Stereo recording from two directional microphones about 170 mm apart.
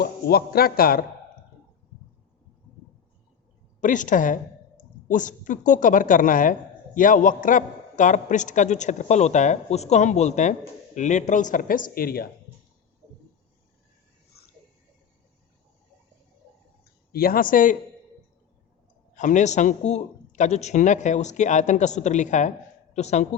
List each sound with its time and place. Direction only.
0.0 s a man's voice: 65° left (ahead or behind)
3.8 s speech: 50° left (ahead or behind)
14.3 s a sound: 70° left (ahead or behind)
17.1 s a man's voice: 60° left (ahead or behind)
19.1 s speech: 45° left (ahead or behind)